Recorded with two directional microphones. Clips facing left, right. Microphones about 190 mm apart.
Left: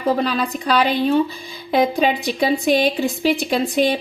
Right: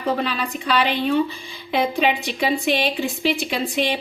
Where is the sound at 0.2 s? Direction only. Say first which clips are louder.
Left 4 dB; 40° left (ahead or behind).